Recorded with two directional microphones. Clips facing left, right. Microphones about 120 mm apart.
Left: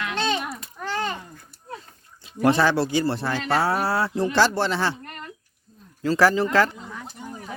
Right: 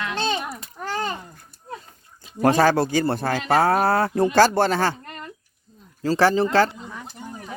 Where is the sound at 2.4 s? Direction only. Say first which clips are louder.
Right 2 dB; 45° right (ahead or behind).